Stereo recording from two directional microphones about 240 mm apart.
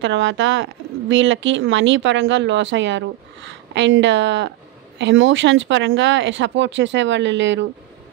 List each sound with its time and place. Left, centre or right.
0.0 s speech: right